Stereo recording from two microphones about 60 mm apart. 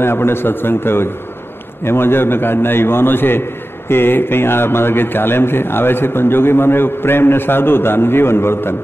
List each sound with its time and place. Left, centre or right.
0.0 s a man's voice: left